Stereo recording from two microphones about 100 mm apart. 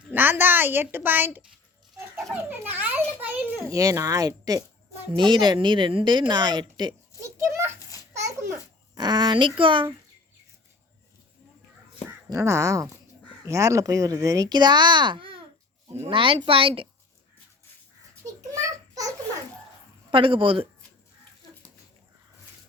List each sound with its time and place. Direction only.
0.1 s a child's voice: 20° right (ahead or behind)
3.7 s speech: 35° right (ahead or behind)
5.1 s speech: 50° right (ahead or behind)
7.2 s a child's voice: 30° right (ahead or behind)
9.0 s speech: 45° right (ahead or behind)
12.3 s a woman's voice: 30° right (ahead or behind); by 16.9 s 65° right (ahead or behind)
18.3 s a sound: 35° right (ahead or behind)
20.1 s a woman's voice: 60° right (ahead or behind)